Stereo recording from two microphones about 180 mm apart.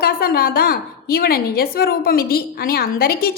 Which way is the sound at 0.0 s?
60° left (ahead or behind).